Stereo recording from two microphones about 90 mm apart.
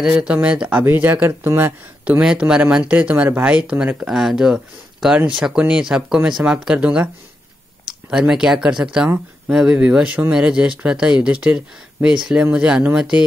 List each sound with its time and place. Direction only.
0.2 s speech: 15° right (ahead or behind)
8.1 s speech: 10° right (ahead or behind)